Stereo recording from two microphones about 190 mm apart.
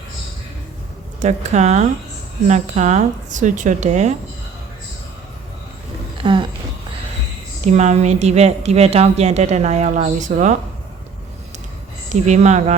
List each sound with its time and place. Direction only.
1.2 s a woman's voice: 35° right (ahead or behind)
6.2 s speech: 25° right (ahead or behind)
7.6 s a woman's voice: 35° right (ahead or behind)
12.0 s a woman's voice: 40° right (ahead or behind)